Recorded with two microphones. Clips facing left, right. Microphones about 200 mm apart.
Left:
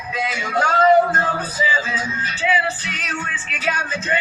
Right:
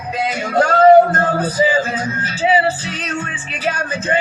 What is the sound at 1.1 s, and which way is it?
Music, 50° right (ahead or behind).